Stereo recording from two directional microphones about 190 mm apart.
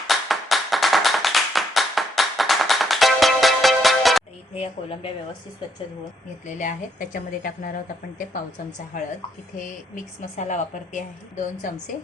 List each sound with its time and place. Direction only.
0.1 s clapping: centre (ahead or behind)
6.6 s a woman's voice: 45° left (ahead or behind)
8.9 s a woman's voice: 40° left (ahead or behind)